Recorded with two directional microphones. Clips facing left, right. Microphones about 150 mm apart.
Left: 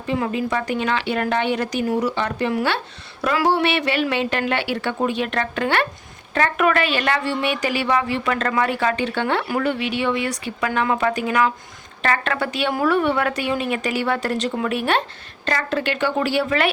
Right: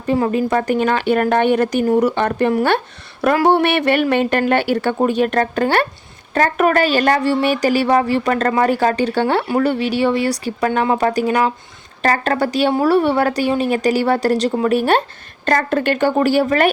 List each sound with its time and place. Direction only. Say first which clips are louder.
0.0 s a woman's voice: right 6 dB; 45° right (ahead or behind)